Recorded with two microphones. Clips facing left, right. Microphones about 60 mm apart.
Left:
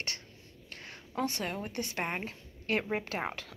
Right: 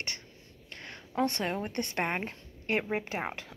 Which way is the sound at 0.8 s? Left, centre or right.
Right.